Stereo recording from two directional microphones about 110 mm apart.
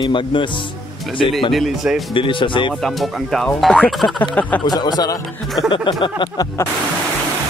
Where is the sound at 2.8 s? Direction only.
5° left (ahead or behind).